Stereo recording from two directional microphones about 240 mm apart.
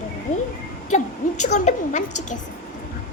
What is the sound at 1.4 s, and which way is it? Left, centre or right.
Speech, left.